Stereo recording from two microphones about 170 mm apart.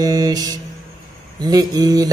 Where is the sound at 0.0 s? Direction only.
20° right (ahead or behind).